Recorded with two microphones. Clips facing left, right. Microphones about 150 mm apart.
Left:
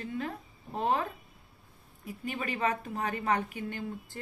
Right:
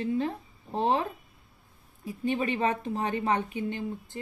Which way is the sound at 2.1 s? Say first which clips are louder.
Right 7 dB; 30° right (ahead or behind).